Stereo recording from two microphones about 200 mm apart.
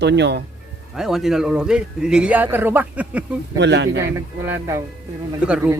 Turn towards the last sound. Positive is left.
turn(degrees=-10)  # may be behind; listen again after turning